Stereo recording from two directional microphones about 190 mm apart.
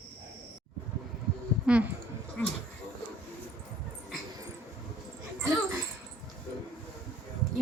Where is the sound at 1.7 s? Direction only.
5° right (ahead or behind).